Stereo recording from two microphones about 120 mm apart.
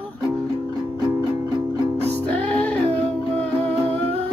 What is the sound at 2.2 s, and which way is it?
Music, 10° left (ahead or behind).